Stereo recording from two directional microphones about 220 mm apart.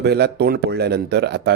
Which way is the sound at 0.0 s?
50° right (ahead or behind).